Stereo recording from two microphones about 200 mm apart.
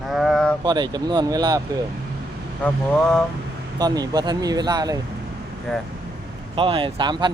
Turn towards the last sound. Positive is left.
turn(degrees=-20)  # may be behind; listen again after turning